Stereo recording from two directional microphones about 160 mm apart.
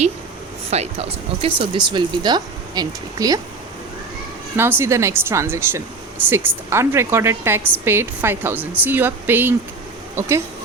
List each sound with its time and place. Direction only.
0.7 s speech: 40° right (ahead or behind); by 3.4 s 25° right (ahead or behind)
4.5 s speech: 15° right (ahead or behind)